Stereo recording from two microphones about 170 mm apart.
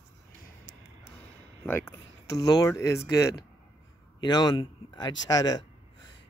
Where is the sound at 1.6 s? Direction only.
15° left (ahead or behind).